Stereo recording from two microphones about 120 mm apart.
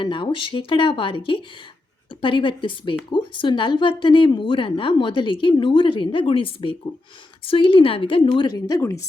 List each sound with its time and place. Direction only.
0.0 s a woman's voice: 40° left (ahead or behind)